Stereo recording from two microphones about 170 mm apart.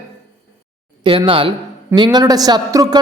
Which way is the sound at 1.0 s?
30° right (ahead or behind).